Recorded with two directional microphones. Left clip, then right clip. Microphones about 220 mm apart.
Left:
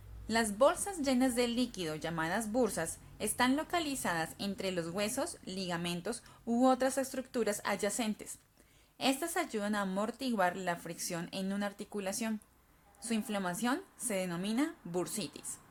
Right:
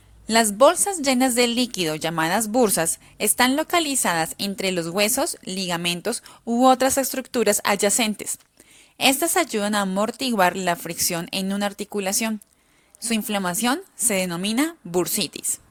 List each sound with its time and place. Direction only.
0.3 s a woman's voice: 35° right (ahead or behind)